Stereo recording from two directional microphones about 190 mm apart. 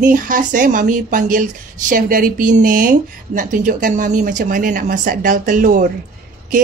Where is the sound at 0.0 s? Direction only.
45° right (ahead or behind).